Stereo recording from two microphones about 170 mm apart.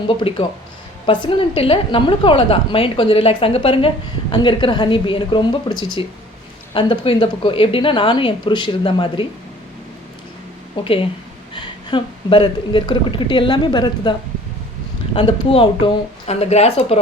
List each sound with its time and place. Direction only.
0.2 s a woman's voice: 30° left (ahead or behind)
10.8 s a woman's voice: 30° left (ahead or behind)